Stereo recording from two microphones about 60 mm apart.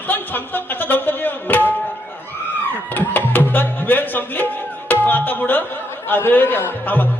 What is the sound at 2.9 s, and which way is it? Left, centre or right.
Music, left.